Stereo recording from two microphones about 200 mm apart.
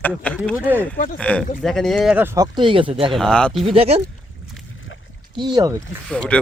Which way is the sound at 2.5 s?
25° right (ahead or behind).